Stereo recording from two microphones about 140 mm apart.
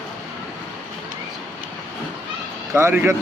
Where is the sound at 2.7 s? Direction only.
15° right (ahead or behind).